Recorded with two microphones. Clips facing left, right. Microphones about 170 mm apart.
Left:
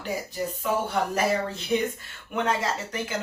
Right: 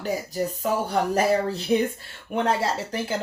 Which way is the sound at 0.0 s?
40° right (ahead or behind).